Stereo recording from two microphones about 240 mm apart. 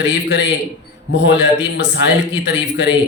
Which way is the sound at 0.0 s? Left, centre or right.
Left.